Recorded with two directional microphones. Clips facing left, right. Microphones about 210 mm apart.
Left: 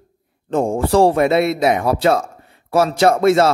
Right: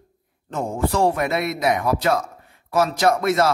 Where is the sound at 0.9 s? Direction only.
30° left (ahead or behind).